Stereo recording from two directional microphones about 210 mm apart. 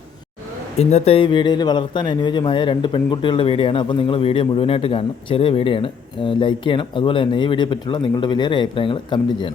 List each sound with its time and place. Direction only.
0.8 s a man's voice: 30° left (ahead or behind)